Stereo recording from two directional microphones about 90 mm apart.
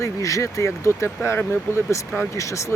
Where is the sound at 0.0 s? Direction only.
35° left (ahead or behind).